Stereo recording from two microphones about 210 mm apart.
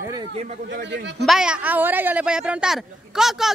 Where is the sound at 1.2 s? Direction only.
5° right (ahead or behind).